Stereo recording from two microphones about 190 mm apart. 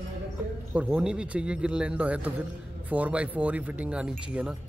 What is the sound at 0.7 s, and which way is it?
Speech, 5° right (ahead or behind).